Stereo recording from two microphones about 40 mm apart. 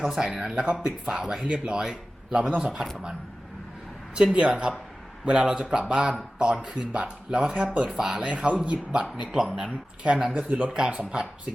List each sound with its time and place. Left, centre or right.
0.0 s speech: centre
4.4 s speech: right
7.5 s speech: right
7.9 s speech: centre
8.2 s speech: right